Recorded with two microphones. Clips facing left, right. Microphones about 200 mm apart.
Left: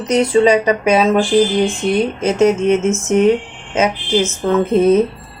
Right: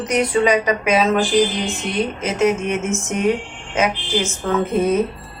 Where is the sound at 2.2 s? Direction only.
25° left (ahead or behind).